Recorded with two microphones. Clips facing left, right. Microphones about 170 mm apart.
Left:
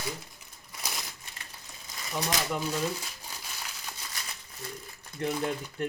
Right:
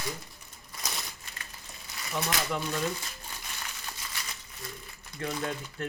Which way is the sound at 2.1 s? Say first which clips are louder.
Left 1 dB; 5° left (ahead or behind).